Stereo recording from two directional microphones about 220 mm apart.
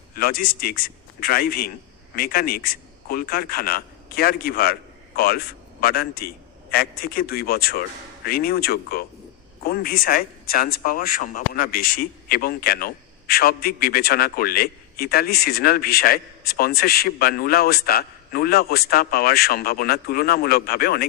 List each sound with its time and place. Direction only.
0.1 s a man's voice: 45° left (ahead or behind)